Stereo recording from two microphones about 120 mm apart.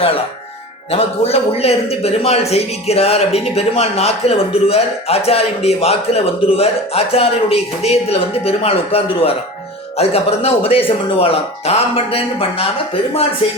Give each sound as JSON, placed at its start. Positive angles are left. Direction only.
{"t": 0.9, "sound": "a man's voice", "side_deg": 55}